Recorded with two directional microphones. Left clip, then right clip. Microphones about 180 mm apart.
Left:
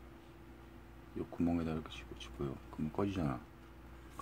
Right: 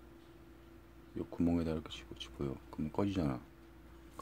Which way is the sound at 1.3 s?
30° right (ahead or behind).